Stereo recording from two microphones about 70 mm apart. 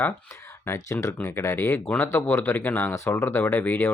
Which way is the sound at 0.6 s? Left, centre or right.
Left.